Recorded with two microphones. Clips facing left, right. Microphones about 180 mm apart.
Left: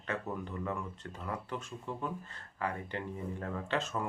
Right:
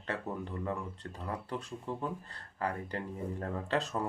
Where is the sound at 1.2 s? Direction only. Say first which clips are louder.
Right 1 dB; 35° right (ahead or behind).